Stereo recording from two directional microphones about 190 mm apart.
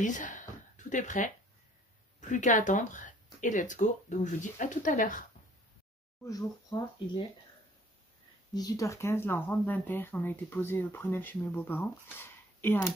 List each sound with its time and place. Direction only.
0.0 s a sound: 40° left (ahead or behind)
2.1 s speech: 40° left (ahead or behind)
6.2 s speech: 20° left (ahead or behind)
8.5 s speech: 20° left (ahead or behind)